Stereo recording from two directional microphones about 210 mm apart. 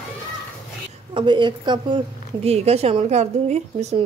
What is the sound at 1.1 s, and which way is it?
A woman's voice, 20° right (ahead or behind).